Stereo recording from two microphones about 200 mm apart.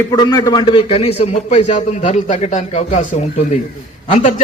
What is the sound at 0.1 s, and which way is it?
A man's voice, 20° left (ahead or behind).